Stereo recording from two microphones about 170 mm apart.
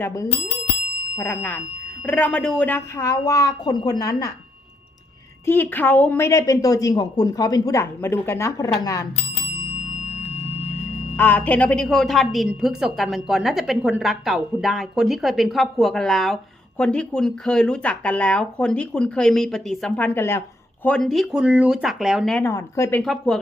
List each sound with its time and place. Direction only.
1.1 s speech: 15° left (ahead or behind)
5.5 s speech: 10° left (ahead or behind)
11.2 s a woman's voice: 10° left (ahead or behind)
22.4 s speech: 15° left (ahead or behind)